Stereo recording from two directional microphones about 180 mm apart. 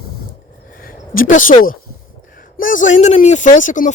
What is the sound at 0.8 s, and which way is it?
Speech, 50° left (ahead or behind).